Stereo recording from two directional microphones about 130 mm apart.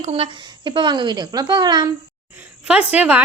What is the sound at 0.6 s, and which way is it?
Speech, 35° right (ahead or behind).